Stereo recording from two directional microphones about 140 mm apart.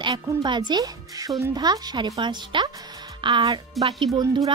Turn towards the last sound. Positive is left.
turn(degrees=-30)  # may be behind; listen again after turning